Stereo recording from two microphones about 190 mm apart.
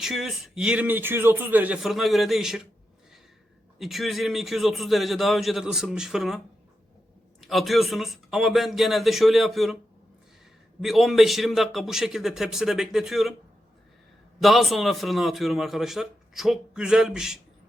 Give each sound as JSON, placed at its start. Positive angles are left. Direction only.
{"t": 0.0, "sound": "a man's voice", "side_deg": 0}
{"t": 3.8, "sound": "a man's voice", "side_deg": 0}
{"t": 7.4, "sound": "a man's voice", "side_deg": 0}
{"t": 10.8, "sound": "a man's voice", "side_deg": 0}
{"t": 14.3, "sound": "a man's voice", "side_deg": 0}